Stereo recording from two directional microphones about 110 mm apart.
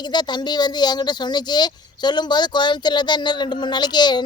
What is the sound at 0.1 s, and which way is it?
Speech, 40° left (ahead or behind).